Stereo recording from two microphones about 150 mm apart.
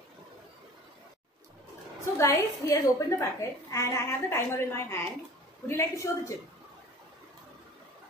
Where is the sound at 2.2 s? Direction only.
20° left (ahead or behind).